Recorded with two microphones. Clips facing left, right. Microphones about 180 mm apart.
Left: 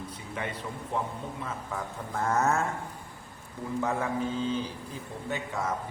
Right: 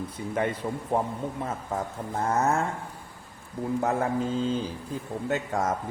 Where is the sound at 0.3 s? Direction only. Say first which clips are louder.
Right 8 dB; 45° right (ahead or behind).